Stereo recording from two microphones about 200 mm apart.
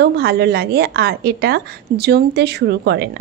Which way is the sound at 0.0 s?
55° right (ahead or behind).